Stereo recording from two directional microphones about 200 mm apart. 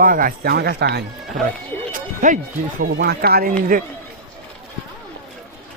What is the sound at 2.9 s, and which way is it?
Speech, 55° right (ahead or behind).